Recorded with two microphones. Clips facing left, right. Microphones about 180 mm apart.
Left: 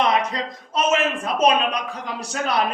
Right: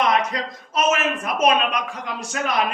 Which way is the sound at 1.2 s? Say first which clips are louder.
Left 1 dB; 30° left (ahead or behind).